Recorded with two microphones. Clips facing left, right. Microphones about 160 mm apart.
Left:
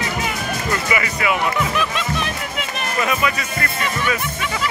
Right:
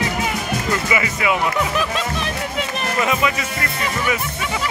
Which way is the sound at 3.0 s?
20° right (ahead or behind).